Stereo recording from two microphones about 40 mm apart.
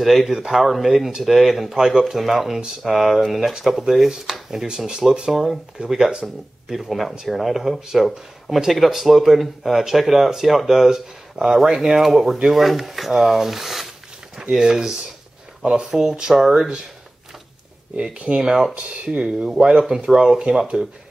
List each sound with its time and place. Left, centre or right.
0.0 s speech: centre
13.1 s a sound: centre
14.5 s speech: centre
15.9 s speech: centre
17.9 s speech: right
18.4 s speech: centre